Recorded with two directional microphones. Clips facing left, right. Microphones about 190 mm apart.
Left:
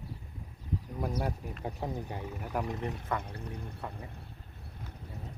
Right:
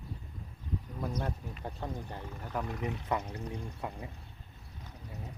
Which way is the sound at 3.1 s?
15° right (ahead or behind).